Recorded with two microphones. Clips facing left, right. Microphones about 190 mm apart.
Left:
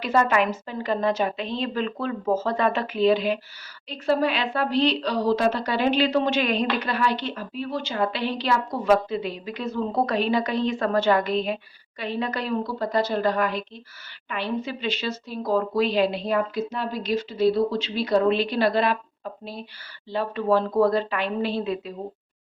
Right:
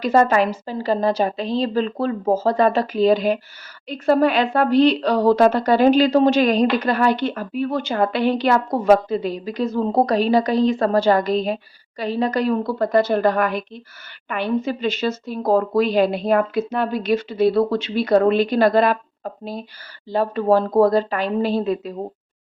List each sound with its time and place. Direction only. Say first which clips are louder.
0.0 s a woman's voice: right 5 dB; 40° right (ahead or behind)